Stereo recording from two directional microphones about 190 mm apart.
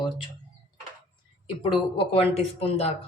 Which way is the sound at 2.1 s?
30° left (ahead or behind).